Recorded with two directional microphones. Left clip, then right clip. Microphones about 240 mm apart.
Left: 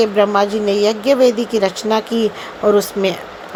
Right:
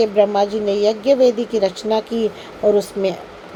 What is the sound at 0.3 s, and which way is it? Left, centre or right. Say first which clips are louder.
A woman's voice: left 2 dB; centre.